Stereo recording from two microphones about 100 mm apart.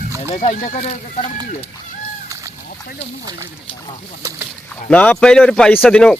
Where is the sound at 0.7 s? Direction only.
90° left.